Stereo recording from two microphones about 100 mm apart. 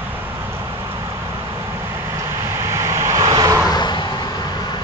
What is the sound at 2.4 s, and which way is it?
Vehicle, 25° right (ahead or behind).